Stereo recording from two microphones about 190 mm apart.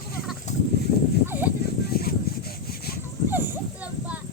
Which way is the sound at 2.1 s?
50° left (ahead or behind).